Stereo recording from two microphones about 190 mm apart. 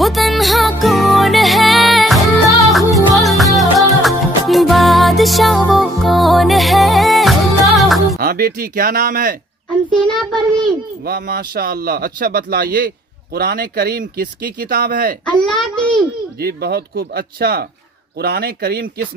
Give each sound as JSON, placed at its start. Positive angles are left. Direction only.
{"t": 0.0, "sound": "music", "side_deg": 0}
{"t": 8.2, "sound": "a man's voice", "side_deg": -50}
{"t": 9.9, "sound": "a child's voice", "side_deg": 0}
{"t": 11.1, "sound": "a man's voice", "side_deg": -50}
{"t": 15.6, "sound": "a child's voice", "side_deg": 5}
{"t": 16.3, "sound": "speech", "side_deg": -55}